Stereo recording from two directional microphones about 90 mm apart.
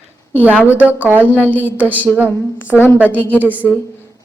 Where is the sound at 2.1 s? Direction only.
5° right (ahead or behind).